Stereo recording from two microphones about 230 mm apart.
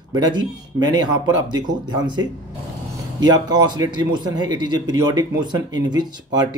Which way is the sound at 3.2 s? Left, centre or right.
Centre.